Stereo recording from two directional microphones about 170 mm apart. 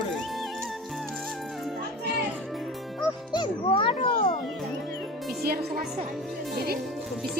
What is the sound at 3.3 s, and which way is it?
Music, 30° left (ahead or behind).